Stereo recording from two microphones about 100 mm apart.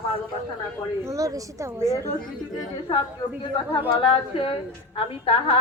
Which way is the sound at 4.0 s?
65° left (ahead or behind).